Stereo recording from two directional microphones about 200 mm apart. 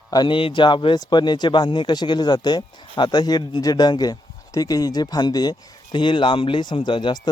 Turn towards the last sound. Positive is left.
turn(degrees=20)  # may be behind; listen again after turning